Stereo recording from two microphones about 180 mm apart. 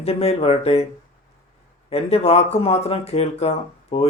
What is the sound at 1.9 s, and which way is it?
Speech, 35° left (ahead or behind).